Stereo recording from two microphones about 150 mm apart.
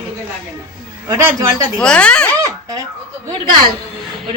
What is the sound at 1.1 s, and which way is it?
Speech, 20° right (ahead or behind).